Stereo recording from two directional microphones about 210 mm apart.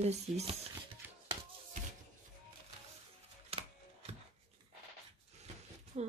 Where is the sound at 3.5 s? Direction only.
30° right (ahead or behind).